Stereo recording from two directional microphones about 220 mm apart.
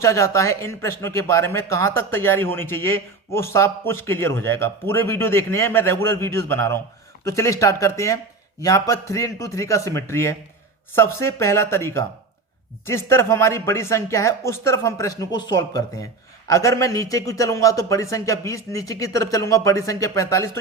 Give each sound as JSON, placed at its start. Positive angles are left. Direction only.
{"t": 0.0, "sound": "a man's voice", "side_deg": 15}